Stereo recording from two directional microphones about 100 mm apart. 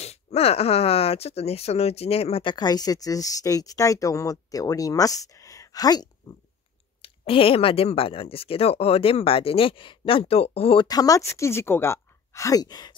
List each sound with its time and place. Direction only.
0.0 s speech: 90° left
2.4 s speech: 45° left (ahead or behind)
7.0 s speech: 65° left (ahead or behind)
10.9 s speech: 35° left (ahead or behind)